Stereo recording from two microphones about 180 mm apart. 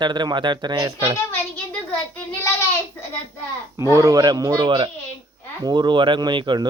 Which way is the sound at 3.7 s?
15° right (ahead or behind).